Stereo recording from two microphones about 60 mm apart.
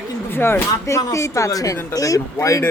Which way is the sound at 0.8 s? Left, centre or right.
Left.